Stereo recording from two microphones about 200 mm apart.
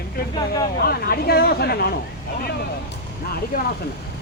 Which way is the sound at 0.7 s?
50° left (ahead or behind).